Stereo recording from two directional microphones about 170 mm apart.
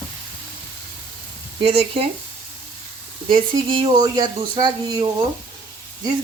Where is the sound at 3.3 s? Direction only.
30° right (ahead or behind).